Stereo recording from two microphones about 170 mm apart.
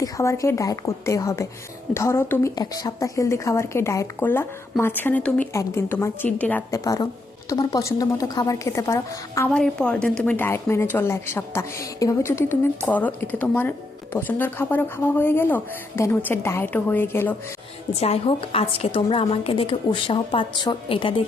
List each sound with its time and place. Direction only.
0.0 s a woman's voice: 15° left (ahead or behind)
9.5 s a woman's voice: 5° left (ahead or behind)
18.0 s a woman's voice: 35° left (ahead or behind)